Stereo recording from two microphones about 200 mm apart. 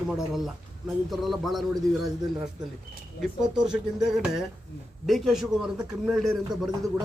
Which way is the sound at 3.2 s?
Centre (ahead or behind).